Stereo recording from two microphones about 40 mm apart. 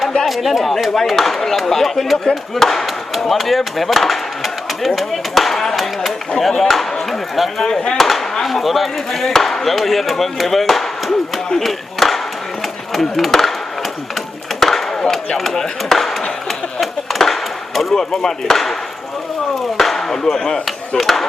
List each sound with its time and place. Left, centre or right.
0.3 s speech: centre
7.6 s speech: centre
7.9 s speech: centre
11.6 s a sound: centre
12.9 s speech: centre
14.6 s chop: centre
15.5 s speech: centre
16.5 s a sound: centre
17.9 s speech: centre
19.7 s chop: centre
21.0 s speech: centre